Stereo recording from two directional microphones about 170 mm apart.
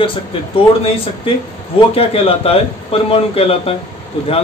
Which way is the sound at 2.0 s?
35° left (ahead or behind).